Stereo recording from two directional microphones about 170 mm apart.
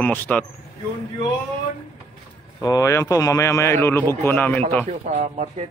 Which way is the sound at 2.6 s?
20° left (ahead or behind).